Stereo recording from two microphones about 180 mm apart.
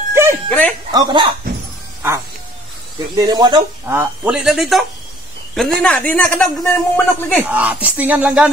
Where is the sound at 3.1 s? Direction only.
25° right (ahead or behind).